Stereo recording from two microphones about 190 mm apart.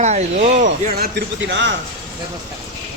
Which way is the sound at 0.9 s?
55° right (ahead or behind).